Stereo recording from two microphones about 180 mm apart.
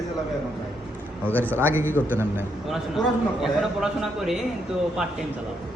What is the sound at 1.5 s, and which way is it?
Speech, 15° right (ahead or behind).